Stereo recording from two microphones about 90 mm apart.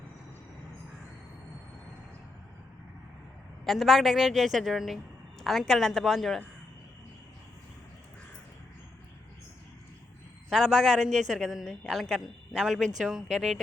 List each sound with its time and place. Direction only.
3.6 s a woman's voice: centre (ahead or behind)
10.5 s a woman's voice: centre (ahead or behind)